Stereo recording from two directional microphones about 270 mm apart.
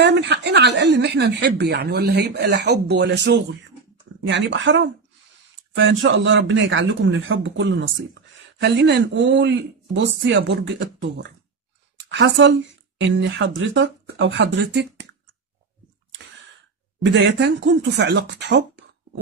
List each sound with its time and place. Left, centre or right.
0.0 s a woman's voice: right
17.0 s a woman's voice: right